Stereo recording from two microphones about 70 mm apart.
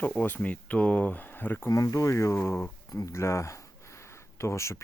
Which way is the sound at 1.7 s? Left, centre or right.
Left.